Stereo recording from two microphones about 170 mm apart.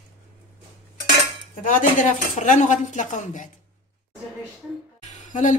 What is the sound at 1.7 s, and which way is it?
Speech, 50° left (ahead or behind).